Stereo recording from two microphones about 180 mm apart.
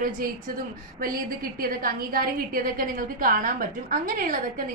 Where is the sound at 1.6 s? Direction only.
55° right (ahead or behind).